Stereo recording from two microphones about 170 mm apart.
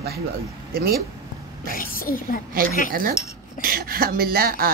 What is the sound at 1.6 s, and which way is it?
Speech, 55° left (ahead or behind).